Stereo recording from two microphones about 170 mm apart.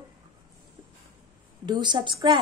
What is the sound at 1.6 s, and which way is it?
Speech, 25° right (ahead or behind).